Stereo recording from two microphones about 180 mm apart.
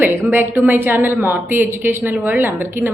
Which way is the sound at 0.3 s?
10° right (ahead or behind).